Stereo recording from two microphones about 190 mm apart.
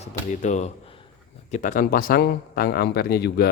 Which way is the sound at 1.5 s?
40° left (ahead or behind).